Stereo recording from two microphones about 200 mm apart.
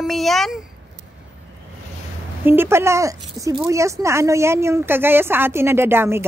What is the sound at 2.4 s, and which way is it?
A woman's voice, 10° right (ahead or behind).